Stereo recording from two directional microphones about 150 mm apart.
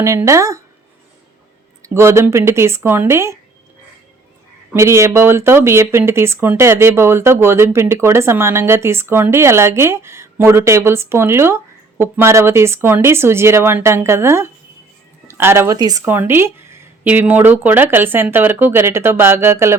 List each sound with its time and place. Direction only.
0.0 s speech: 20° right (ahead or behind)
1.8 s speech: 20° right (ahead or behind)
4.7 s speech: 20° right (ahead or behind)